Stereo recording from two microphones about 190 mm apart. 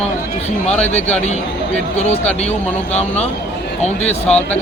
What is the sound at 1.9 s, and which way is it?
Speech, 35° left (ahead or behind).